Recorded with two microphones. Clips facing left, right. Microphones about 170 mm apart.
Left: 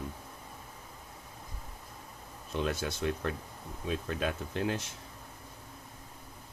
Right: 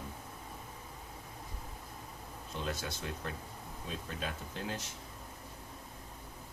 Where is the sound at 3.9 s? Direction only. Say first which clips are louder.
Left 8 dB; 65° left (ahead or behind).